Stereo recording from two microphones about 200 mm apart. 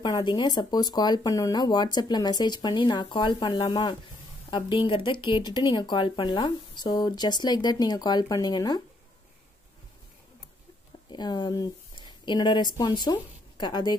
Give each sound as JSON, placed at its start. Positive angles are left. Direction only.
{"t": 0.0, "sound": "speech", "side_deg": 20}
{"t": 11.1, "sound": "a sound", "side_deg": 20}
{"t": 12.7, "sound": "a woman's voice", "side_deg": 20}